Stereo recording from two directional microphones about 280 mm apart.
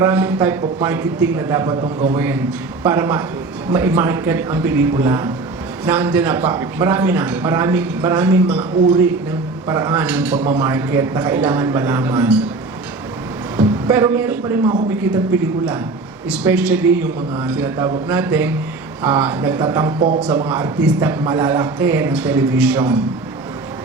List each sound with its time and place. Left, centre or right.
0.0 s a man's voice: centre; by 2.1 s right
2.1 s a man's voice: centre
13.6 s a man's voice: centre